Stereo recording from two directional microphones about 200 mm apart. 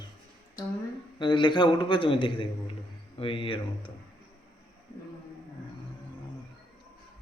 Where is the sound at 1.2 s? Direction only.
25° left (ahead or behind).